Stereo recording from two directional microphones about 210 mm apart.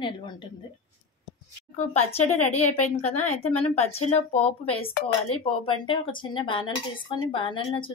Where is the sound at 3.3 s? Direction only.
90° left.